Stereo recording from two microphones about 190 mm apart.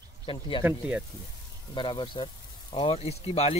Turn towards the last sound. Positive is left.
turn(degrees=35)  # may be behind; listen again after turning